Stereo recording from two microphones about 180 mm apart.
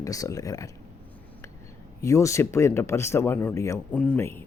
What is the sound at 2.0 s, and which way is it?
Speech, 15° left (ahead or behind).